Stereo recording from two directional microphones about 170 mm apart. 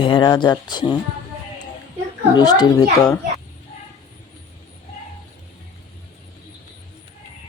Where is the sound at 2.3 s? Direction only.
25° left (ahead or behind).